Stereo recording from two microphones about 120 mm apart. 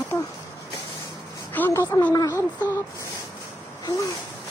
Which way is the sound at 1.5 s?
15° left (ahead or behind).